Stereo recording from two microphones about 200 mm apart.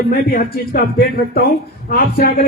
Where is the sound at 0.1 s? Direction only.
45° left (ahead or behind).